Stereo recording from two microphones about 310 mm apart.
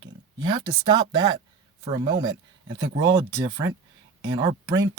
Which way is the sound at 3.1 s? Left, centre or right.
Centre.